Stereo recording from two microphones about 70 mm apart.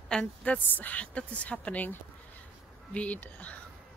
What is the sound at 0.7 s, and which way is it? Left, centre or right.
Speech, left.